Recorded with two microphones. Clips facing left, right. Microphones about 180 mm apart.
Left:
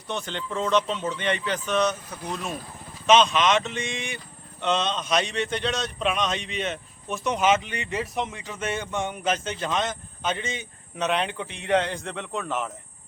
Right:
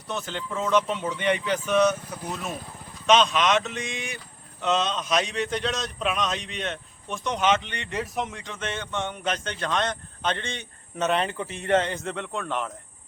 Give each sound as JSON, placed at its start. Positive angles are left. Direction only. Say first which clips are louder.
{"t": 0.1, "sound": "a man's voice", "louder": "left 1 dB", "side_deg": -5}